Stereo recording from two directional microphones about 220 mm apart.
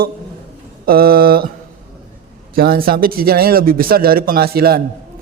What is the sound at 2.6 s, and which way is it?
Speech, 45° right (ahead or behind).